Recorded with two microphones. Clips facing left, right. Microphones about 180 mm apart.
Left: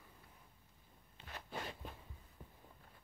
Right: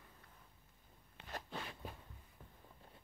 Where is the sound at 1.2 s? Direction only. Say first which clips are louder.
Right 1 dB; 60° right (ahead or behind).